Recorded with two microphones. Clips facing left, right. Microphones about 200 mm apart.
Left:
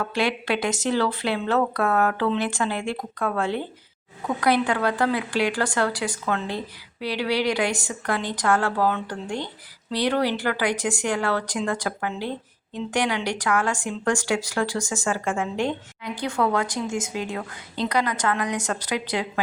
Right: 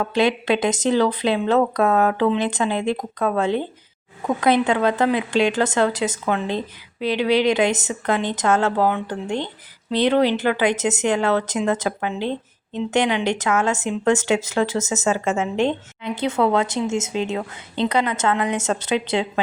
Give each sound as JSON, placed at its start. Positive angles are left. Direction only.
{"t": 0.0, "sound": "speech", "side_deg": -20}